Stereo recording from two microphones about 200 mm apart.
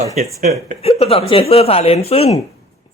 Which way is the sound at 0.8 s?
30° left (ahead or behind).